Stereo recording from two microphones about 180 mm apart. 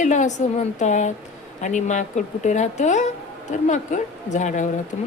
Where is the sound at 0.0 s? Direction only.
45° left (ahead or behind).